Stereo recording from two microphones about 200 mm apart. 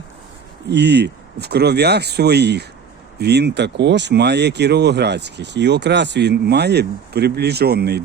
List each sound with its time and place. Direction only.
0.7 s speech: 55° right (ahead or behind)